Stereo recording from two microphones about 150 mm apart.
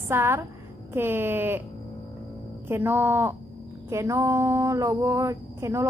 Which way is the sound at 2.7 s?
15° right (ahead or behind).